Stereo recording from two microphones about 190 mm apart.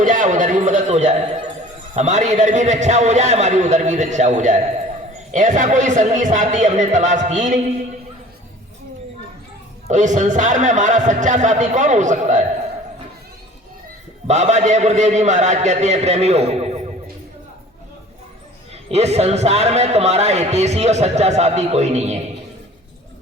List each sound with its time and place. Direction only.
0.0 s a sound: 40° right (ahead or behind)
2.0 s a man's voice: 40° right (ahead or behind)
9.8 s a man's voice: 40° right (ahead or behind)
14.3 s a man's voice: 40° right (ahead or behind)
18.7 s a man's voice: 35° right (ahead or behind)